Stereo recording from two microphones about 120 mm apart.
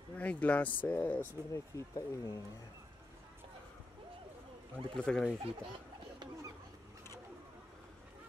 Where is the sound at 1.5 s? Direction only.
25° left (ahead or behind).